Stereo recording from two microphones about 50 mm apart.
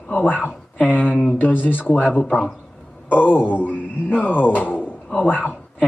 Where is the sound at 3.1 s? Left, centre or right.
Left.